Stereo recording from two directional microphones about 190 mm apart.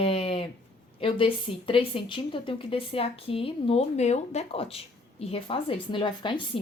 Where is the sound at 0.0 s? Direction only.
30° left (ahead or behind).